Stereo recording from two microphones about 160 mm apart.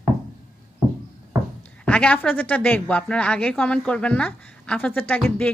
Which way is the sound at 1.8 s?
10° left (ahead or behind).